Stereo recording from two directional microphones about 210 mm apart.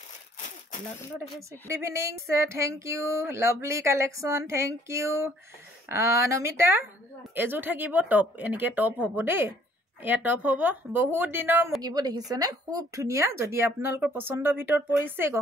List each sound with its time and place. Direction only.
1.7 s a woman's voice: 15° right (ahead or behind)